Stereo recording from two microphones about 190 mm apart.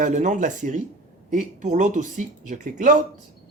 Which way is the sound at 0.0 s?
40° right (ahead or behind).